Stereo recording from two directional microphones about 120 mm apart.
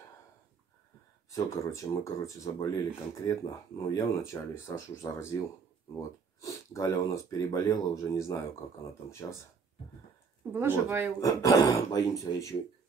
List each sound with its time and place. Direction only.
1.3 s speech: 25° left (ahead or behind)
10.4 s speech: 20° right (ahead or behind)
11.1 s speech: 25° left (ahead or behind)